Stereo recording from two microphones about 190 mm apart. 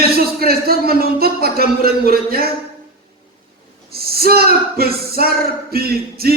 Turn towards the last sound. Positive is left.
turn(degrees=-55)  # may be behind; listen again after turning